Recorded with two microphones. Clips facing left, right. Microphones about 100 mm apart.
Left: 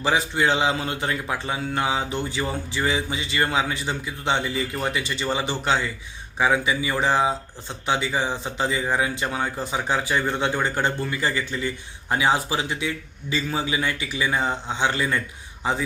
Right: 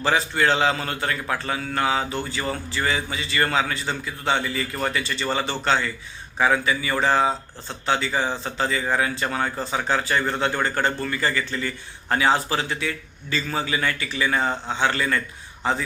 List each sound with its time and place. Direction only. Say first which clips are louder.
0.0 s a man's voice: right 1 dB; 15° left (ahead or behind)